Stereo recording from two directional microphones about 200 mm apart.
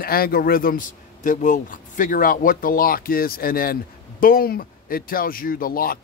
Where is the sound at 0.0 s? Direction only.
50° left (ahead or behind).